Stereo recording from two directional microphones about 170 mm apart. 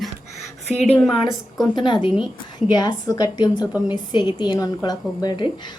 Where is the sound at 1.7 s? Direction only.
30° left (ahead or behind).